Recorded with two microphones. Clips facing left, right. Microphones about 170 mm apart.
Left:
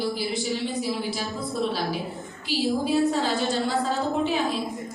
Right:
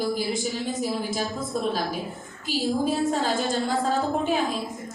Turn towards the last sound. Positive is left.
turn(degrees=-45)  # may be behind; listen again after turning